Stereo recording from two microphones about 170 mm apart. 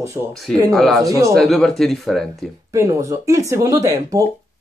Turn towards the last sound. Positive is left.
turn(degrees=-20)  # may be behind; listen again after turning